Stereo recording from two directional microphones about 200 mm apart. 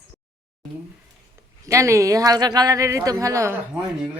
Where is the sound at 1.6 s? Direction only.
15° right (ahead or behind).